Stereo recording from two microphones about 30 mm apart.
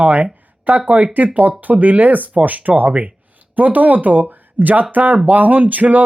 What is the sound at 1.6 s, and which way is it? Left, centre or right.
Speech, right.